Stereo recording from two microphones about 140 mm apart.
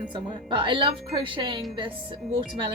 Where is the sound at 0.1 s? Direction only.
35° right (ahead or behind).